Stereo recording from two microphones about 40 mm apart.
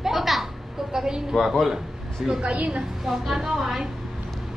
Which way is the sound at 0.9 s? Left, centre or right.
Centre.